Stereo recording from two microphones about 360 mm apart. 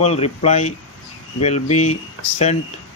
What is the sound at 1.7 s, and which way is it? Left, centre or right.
Speech, left.